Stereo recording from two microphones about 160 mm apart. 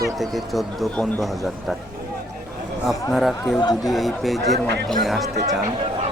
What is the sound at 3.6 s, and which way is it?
Speech, 25° left (ahead or behind).